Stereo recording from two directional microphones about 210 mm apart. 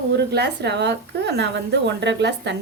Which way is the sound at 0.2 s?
50° right (ahead or behind).